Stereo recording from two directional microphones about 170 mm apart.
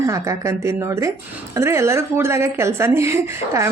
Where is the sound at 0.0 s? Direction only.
20° right (ahead or behind).